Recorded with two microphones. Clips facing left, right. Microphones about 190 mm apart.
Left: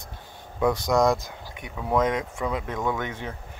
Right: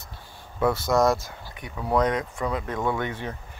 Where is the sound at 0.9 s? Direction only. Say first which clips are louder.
Even; centre (ahead or behind).